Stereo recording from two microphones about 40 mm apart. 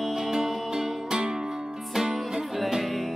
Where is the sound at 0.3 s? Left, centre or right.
Centre.